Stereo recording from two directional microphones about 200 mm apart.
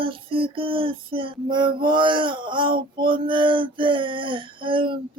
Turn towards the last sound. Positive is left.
turn(degrees=-25)  # may be behind; listen again after turning